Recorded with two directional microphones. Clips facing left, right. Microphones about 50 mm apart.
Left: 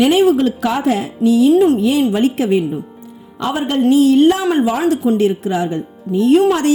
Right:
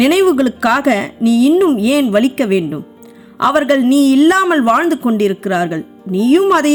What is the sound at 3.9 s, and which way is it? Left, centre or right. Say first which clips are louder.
Speech: even; right.